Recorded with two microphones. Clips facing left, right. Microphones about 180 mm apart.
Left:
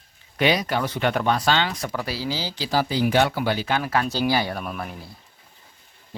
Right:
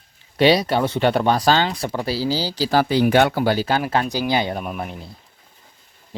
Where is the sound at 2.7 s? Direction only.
65° right (ahead or behind).